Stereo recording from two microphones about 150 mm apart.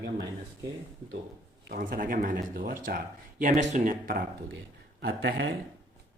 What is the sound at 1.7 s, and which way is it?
Speech, 70° right (ahead or behind).